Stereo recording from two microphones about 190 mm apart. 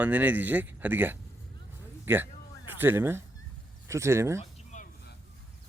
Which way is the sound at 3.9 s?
15° right (ahead or behind).